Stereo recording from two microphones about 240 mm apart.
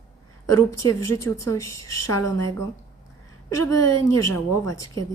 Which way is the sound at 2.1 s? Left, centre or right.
Centre.